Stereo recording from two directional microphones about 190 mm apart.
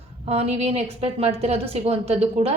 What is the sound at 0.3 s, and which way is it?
A woman's voice, 35° right (ahead or behind).